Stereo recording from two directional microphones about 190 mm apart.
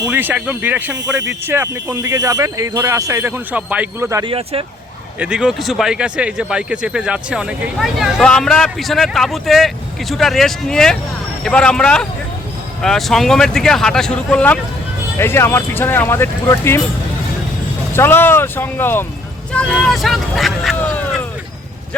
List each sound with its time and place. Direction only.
0.0 s speech: 10° right (ahead or behind)
4.2 s speech: 30° right (ahead or behind)
5.2 s speech: 5° right (ahead or behind); by 16.8 s 15° left (ahead or behind)
17.9 s speech: 10° left (ahead or behind)